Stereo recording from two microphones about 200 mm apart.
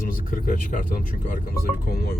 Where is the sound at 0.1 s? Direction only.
45° left (ahead or behind).